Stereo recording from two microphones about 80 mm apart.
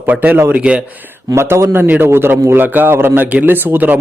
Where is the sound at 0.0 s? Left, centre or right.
Right.